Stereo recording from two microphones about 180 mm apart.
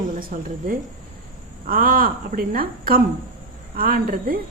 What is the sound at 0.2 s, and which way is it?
Speech, 50° right (ahead or behind).